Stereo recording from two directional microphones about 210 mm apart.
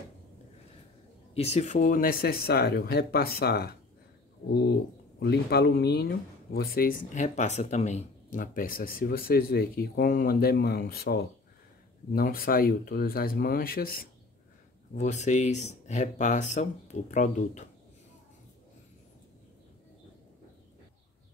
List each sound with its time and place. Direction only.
1.3 s speech: 30° left (ahead or behind)
15.0 s speech: 35° left (ahead or behind)